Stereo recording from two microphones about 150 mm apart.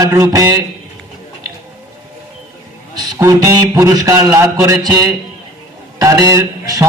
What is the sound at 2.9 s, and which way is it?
A man's voice, 20° right (ahead or behind).